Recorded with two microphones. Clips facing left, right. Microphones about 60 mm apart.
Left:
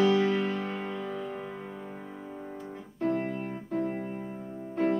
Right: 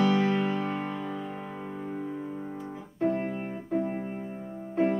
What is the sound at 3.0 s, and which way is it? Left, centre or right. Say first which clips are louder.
Music: right 1 dB; centre.